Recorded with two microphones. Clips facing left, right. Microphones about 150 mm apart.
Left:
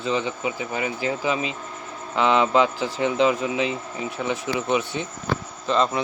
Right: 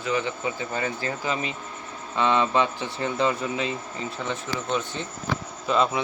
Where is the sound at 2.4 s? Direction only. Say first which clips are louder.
Left 4 dB; 15° left (ahead or behind).